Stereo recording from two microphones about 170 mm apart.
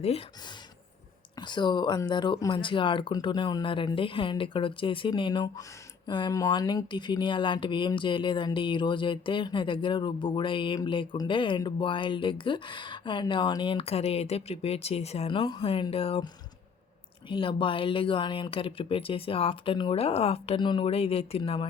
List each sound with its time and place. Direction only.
0.0 s speech: 35° left (ahead or behind)
1.4 s speech: 25° left (ahead or behind)